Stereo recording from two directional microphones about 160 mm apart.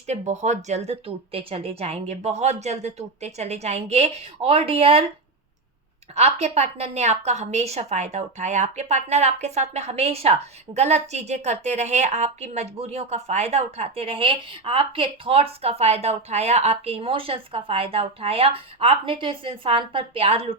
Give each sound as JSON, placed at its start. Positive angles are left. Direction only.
{"t": 0.1, "sound": "speech", "side_deg": -45}
{"t": 6.1, "sound": "a woman's voice", "side_deg": -40}